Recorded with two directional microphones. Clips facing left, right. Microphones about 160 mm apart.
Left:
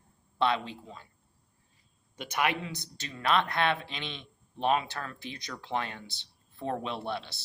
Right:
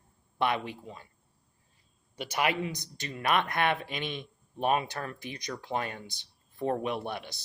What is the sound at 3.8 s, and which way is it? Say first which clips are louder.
Speech: right 5 dB; 50° right (ahead or behind).